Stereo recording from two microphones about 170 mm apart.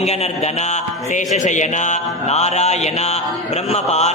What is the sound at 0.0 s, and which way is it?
Mantra, 40° left (ahead or behind).